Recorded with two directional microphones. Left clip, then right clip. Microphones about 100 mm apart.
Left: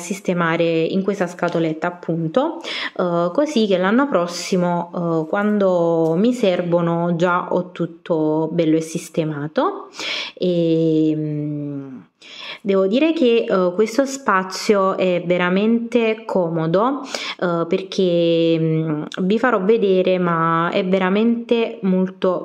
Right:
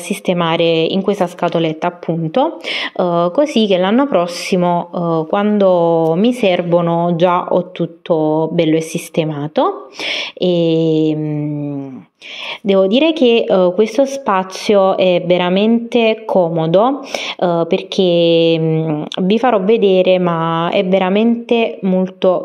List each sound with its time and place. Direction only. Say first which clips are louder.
0.3 s a woman's voice: right 4 dB; 35° right (ahead or behind)
0.7 s a woman's voice: right 4 dB; 20° left (ahead or behind)
1.0 s a woman's voice: right 5 dB; 45° right (ahead or behind)
6.7 s a woman's voice: right 5 dB; 25° right (ahead or behind)
8.5 s a woman's voice: right 4 dB; 40° right (ahead or behind)
12.6 s a woman's voice: right 5 dB; 50° right (ahead or behind)
16.3 s a woman's voice: right 6 dB; 25° right (ahead or behind)
21.8 s a woman's voice: right 6 dB; 20° right (ahead or behind)